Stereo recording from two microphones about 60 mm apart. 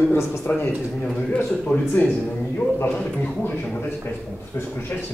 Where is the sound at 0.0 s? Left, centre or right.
Left.